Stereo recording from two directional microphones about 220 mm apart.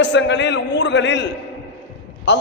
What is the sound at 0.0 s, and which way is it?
A man's voice, 55° left (ahead or behind).